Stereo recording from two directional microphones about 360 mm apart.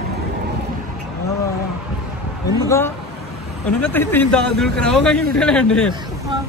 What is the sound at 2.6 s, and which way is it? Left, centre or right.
A man's voice, centre.